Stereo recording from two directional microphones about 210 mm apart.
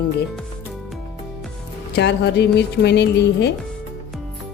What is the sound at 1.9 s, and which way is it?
Speech, 55° left (ahead or behind).